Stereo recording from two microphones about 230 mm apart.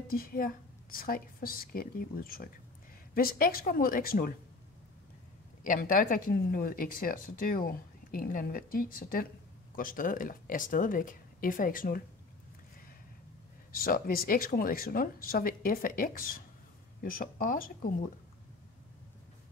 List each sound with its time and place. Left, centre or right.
0.1 s speech: left
5.6 s speech: left
13.7 s speech: left